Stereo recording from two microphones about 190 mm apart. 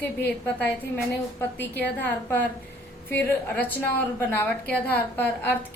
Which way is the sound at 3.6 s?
10° left (ahead or behind).